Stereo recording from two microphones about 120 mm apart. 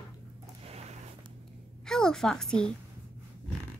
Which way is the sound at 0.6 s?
60° right (ahead or behind).